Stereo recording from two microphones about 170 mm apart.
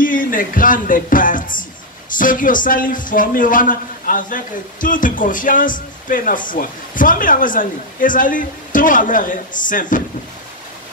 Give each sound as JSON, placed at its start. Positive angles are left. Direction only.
{"t": 0.0, "sound": "a man's voice", "side_deg": 50}